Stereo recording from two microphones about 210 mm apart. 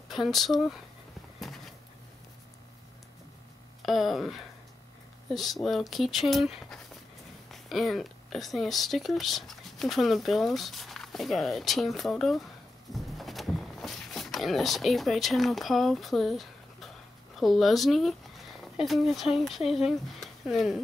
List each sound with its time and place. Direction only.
0.1 s speech: centre (ahead or behind)
3.8 s speech: centre (ahead or behind)
12.9 s a sound: centre (ahead or behind)
17.4 s speech: centre (ahead or behind)